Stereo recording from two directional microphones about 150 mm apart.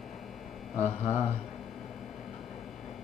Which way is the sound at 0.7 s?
45° left (ahead or behind).